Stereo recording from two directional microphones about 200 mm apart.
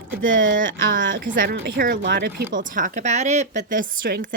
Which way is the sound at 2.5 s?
40° right (ahead or behind).